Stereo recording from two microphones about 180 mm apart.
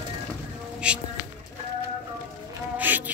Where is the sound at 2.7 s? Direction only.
10° right (ahead or behind).